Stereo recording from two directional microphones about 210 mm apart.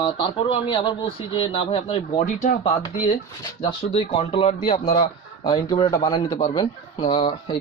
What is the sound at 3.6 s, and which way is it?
Speech, 25° left (ahead or behind).